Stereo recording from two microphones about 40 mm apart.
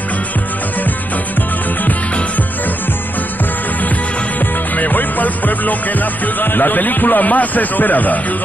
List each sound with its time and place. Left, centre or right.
4.7 s music: left